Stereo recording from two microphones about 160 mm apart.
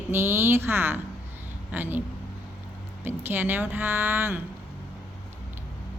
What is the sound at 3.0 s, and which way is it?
Speech, 15° right (ahead or behind).